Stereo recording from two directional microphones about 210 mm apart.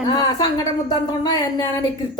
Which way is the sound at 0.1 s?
20° left (ahead or behind).